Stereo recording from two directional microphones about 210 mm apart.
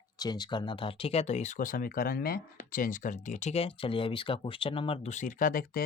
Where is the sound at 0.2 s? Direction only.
20° left (ahead or behind).